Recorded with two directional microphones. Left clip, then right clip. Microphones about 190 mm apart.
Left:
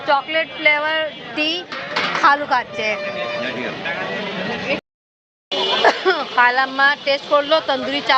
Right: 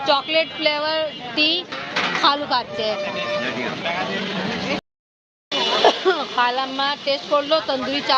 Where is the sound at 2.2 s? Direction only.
5° left (ahead or behind).